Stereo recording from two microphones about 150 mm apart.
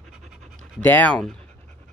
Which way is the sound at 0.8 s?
10° left (ahead or behind).